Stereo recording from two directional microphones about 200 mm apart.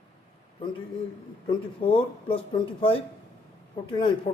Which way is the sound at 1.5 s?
25° left (ahead or behind).